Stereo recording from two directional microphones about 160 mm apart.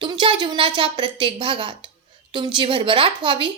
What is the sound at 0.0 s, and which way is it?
A woman's voice, 30° right (ahead or behind).